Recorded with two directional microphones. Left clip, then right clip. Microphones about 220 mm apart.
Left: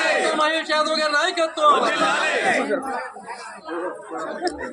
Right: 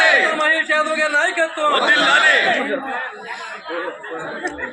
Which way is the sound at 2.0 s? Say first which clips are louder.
Right 7 dB; 55° left (ahead or behind).